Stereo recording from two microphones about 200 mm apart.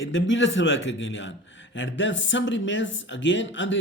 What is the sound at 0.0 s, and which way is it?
Speech, 70° left (ahead or behind).